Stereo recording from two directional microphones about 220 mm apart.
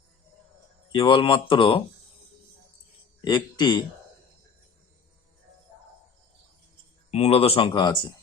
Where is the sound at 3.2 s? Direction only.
20° left (ahead or behind).